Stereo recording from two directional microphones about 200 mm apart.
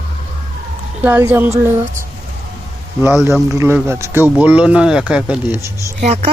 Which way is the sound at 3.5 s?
15° right (ahead or behind).